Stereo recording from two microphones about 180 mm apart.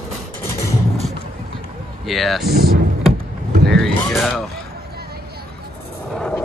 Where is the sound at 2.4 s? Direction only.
60° right (ahead or behind).